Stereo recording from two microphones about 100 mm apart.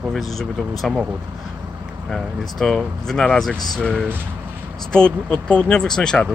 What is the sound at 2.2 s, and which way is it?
Speech, 5° left (ahead or behind).